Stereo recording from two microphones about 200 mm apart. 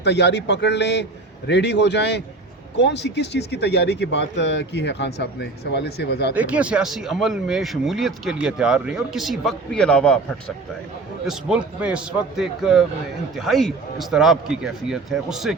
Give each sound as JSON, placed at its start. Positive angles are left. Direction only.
{"t": 0.0, "sound": "speech", "side_deg": 60}
{"t": 6.3, "sound": "speech", "side_deg": -5}
{"t": 11.3, "sound": "speech", "side_deg": -5}